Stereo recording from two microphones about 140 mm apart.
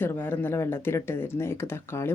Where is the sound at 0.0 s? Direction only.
15° left (ahead or behind).